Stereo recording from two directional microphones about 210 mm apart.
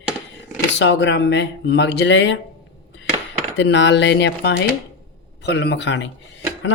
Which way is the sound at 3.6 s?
60° left (ahead or behind).